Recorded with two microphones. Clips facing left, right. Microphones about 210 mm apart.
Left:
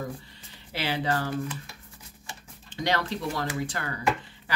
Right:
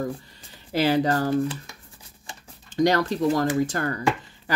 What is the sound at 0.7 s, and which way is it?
Speech, 40° right (ahead or behind).